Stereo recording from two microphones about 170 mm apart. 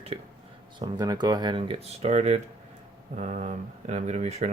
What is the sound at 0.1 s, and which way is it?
Speech, 35° right (ahead or behind).